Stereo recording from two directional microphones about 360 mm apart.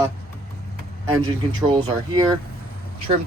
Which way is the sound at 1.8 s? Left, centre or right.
Centre.